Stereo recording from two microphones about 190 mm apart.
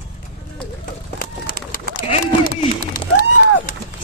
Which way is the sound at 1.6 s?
55° right (ahead or behind).